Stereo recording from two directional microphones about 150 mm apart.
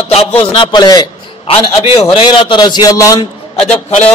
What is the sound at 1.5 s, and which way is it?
A man's voice, 40° left (ahead or behind).